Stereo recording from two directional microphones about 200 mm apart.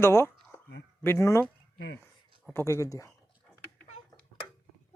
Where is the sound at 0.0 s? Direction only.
15° left (ahead or behind).